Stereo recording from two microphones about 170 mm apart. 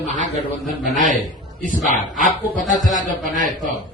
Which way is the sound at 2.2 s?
50° left (ahead or behind).